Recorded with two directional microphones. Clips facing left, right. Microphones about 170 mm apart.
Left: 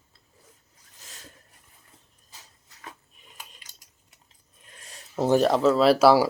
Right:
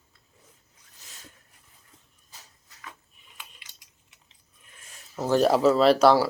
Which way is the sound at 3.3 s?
40° left (ahead or behind).